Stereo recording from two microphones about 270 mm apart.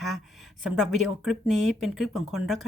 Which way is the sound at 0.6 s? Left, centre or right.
Centre.